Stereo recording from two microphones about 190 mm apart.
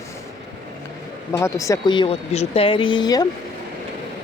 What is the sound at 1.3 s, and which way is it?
Speech, 15° left (ahead or behind).